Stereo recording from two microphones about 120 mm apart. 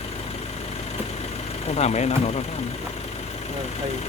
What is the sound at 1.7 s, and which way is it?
Speech, 65° left (ahead or behind).